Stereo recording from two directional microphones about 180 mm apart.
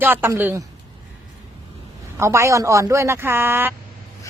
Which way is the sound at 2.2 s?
15° right (ahead or behind).